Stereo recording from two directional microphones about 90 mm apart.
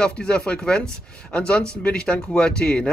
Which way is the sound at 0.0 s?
10° left (ahead or behind).